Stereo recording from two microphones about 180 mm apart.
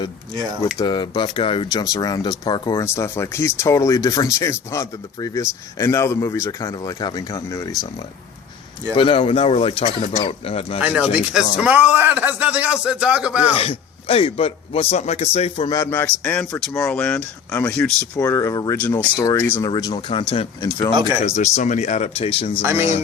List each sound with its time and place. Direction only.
0.8 s speech: 25° left (ahead or behind)
2.8 s speech: 15° left (ahead or behind)
9.0 s a man's voice: 30° left (ahead or behind)
10.8 s a man's voice: 5° right (ahead or behind)
13.6 s a man's voice: 35° left (ahead or behind)
15.7 s speech: 10° left (ahead or behind)
18.2 s speech: 15° left (ahead or behind)
20.6 s speech: 20° left (ahead or behind)
21.2 s a man's voice: 40° left (ahead or behind)
22.6 s a man's voice: 15° right (ahead or behind)